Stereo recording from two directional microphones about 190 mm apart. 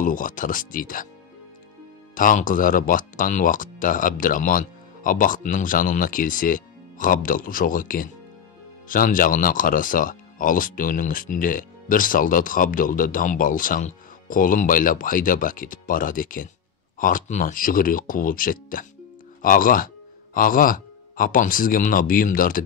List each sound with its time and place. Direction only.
0.0 s speech: 45° left (ahead or behind)
2.1 s speech: 45° left (ahead or behind)